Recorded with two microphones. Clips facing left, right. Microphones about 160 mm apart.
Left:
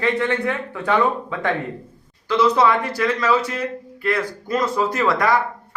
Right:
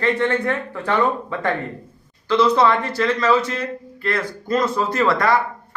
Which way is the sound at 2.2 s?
10° left (ahead or behind).